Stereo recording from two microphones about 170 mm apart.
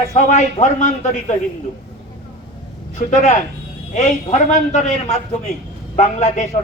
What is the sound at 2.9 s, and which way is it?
A man's voice, 45° left (ahead or behind).